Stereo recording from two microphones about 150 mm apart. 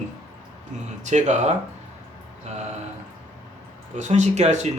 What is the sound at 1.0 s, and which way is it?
Speech, 50° right (ahead or behind).